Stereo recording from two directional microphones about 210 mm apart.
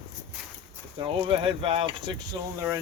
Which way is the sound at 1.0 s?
25° right (ahead or behind).